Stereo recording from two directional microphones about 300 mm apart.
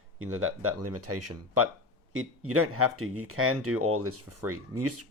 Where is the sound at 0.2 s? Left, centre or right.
Right.